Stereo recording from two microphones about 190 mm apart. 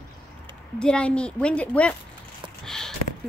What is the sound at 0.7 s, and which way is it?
A woman's voice, 5° left (ahead or behind).